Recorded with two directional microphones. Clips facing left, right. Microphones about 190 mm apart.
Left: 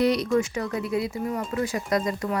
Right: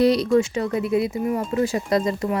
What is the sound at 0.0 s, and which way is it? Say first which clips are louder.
A woman's voice: right 4 dB; 30° right (ahead or behind).